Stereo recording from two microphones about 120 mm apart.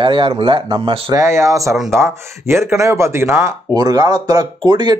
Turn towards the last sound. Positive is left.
turn(degrees=-35)  # may be behind; listen again after turning